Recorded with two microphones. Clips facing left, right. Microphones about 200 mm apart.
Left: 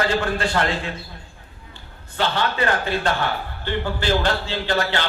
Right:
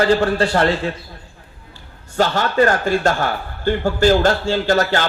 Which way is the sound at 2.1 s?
45° right (ahead or behind).